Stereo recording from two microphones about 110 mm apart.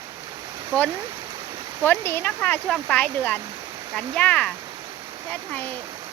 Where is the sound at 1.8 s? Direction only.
20° left (ahead or behind).